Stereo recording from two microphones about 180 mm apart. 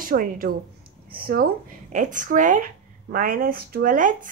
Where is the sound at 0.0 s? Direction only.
50° right (ahead or behind).